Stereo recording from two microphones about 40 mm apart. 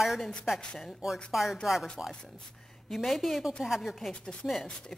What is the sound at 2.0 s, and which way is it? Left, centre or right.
Speech, right.